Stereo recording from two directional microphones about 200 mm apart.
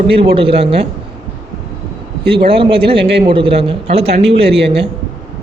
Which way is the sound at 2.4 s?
25° right (ahead or behind).